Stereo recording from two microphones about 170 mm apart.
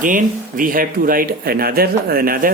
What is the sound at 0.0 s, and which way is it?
Speech, 55° right (ahead or behind).